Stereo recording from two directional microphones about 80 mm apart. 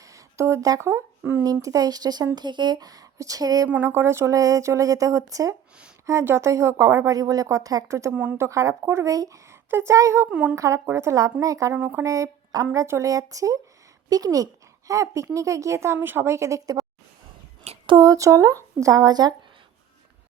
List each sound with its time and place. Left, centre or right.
0.0 s a sound: right
0.8 s a woman's voice: right
1.2 s speech: right
1.5 s speech: right
3.7 s a woman's voice: right
6.1 s a woman's voice: right
8.1 s speech: right
8.4 s a woman's voice: right
9.5 s a sound: right
9.9 s a woman's voice: right
11.7 s speech: right
12.0 s a woman's voice: right
18.0 s speech: right